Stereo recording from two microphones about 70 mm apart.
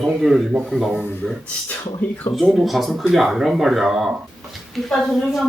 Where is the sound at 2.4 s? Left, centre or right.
Centre.